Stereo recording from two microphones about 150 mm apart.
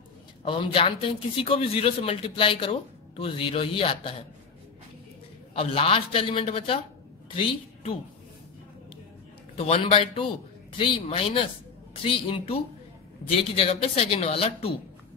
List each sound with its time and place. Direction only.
0.5 s a man's voice: 35° left (ahead or behind)
5.5 s a man's voice: 40° left (ahead or behind)
9.6 s a man's voice: 40° left (ahead or behind)
13.6 s a man's voice: 40° left (ahead or behind)